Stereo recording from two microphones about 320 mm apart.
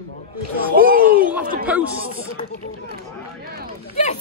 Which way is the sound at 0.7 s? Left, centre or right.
Right.